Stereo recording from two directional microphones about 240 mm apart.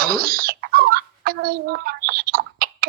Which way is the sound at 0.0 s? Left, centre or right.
Right.